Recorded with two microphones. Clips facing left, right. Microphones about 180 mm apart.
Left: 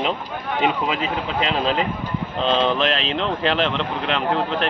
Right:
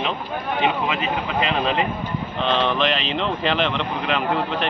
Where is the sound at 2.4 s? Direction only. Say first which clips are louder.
Left 2 dB; 30° left (ahead or behind).